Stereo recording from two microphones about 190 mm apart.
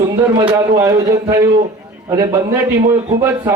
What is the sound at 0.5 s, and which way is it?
A man's voice, 15° right (ahead or behind).